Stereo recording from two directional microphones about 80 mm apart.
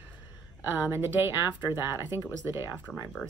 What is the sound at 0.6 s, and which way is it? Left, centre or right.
Speech, right.